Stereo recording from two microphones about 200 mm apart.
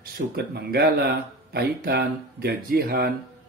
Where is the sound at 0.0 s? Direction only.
50° right (ahead or behind).